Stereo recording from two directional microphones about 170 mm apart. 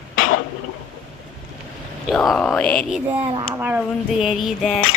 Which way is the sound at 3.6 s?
10° right (ahead or behind).